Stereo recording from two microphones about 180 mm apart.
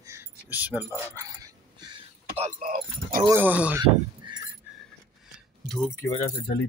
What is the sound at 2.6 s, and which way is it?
Speech, 50° right (ahead or behind).